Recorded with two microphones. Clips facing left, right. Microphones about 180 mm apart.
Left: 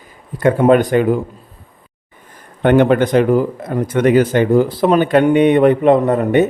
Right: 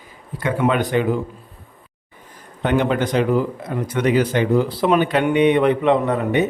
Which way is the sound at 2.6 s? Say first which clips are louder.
Left 7 dB; 55° left (ahead or behind).